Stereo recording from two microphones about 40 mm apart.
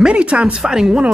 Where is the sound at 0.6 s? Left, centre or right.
Centre.